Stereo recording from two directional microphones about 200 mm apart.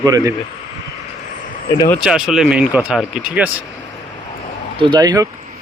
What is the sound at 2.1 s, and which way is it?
Speech, 5° right (ahead or behind).